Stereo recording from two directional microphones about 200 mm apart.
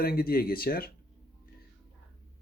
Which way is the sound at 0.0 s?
50° left (ahead or behind).